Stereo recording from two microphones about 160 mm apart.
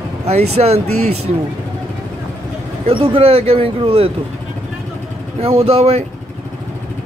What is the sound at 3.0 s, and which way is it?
Speech, 35° right (ahead or behind).